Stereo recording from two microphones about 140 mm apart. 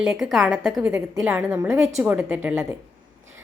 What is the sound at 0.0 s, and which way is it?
Speech, centre (ahead or behind).